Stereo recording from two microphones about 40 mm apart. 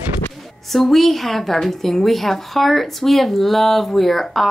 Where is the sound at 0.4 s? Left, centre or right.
Centre.